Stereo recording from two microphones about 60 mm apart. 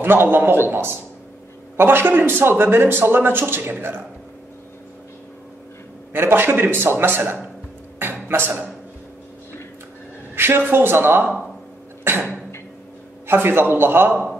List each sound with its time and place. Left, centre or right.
0.0 s speech: right
6.1 s speech: right
8.0 s a sound: right
10.3 s a sound: right
10.7 s speech: right
13.3 s speech: right